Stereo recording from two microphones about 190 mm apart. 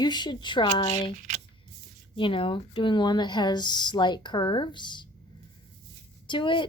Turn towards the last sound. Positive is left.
turn(degrees=25)  # may be behind; listen again after turning